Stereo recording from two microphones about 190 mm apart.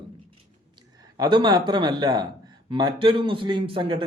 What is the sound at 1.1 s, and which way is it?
Speech, 25° right (ahead or behind).